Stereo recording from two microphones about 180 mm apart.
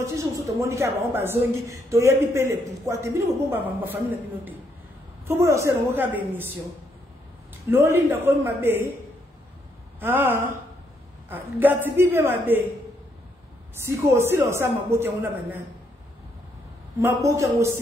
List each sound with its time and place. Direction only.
0.0 s a man's voice: 15° right (ahead or behind)
5.2 s a man's voice: 15° right (ahead or behind)
7.7 s a man's voice: 15° right (ahead or behind)
9.9 s a man's voice: 10° right (ahead or behind)
13.8 s a man's voice: 15° right (ahead or behind)
17.0 s a man's voice: 15° right (ahead or behind)